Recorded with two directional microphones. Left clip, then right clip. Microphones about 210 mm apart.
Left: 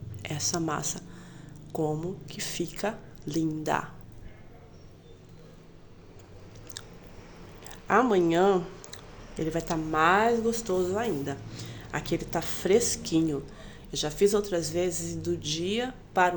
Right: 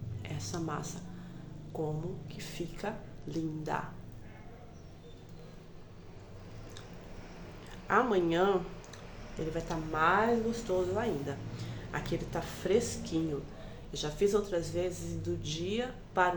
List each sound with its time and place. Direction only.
0.2 s speech: 45° left (ahead or behind)
7.7 s speech: 40° left (ahead or behind)